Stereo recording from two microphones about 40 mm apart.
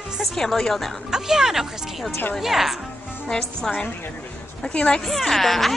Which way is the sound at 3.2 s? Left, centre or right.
Centre.